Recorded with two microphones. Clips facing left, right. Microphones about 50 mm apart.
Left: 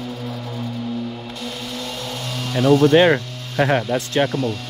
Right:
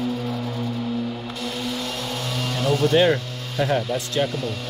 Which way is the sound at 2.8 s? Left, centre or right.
Left.